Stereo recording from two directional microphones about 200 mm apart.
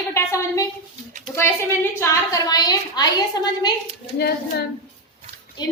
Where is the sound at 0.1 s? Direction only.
15° left (ahead or behind).